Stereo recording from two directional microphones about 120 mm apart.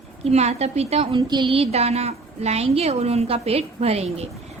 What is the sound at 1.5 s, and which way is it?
A woman's voice, 55° right (ahead or behind).